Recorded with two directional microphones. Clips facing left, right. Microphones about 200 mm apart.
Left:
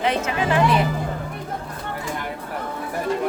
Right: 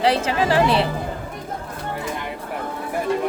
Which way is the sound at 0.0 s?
30° right (ahead or behind).